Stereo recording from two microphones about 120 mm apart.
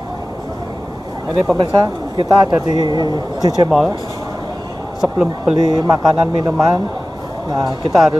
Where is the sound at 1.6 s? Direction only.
35° right (ahead or behind).